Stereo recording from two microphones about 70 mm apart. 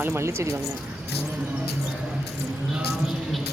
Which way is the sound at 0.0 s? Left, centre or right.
Right.